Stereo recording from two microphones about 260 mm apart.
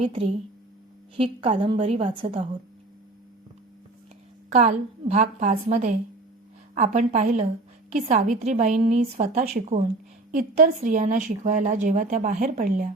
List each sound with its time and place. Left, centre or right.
0.0 s speech: right
4.5 s speech: right